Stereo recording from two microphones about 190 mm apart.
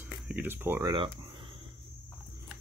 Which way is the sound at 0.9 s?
25° right (ahead or behind).